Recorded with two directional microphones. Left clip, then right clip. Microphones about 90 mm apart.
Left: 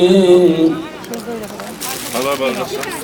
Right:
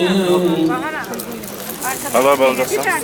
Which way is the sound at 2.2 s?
40° right (ahead or behind).